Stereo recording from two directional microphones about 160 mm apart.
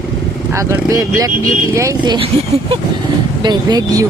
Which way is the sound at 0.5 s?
20° right (ahead or behind).